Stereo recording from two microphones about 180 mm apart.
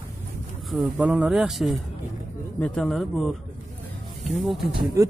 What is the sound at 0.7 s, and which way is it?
Speech, 5° right (ahead or behind).